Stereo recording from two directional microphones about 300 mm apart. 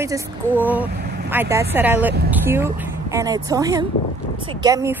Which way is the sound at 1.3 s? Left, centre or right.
Centre.